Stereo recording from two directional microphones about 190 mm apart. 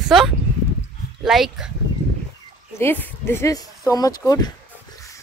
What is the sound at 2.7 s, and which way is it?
Speech, 10° left (ahead or behind).